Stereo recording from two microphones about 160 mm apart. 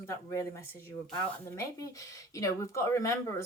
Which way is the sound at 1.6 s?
20° left (ahead or behind).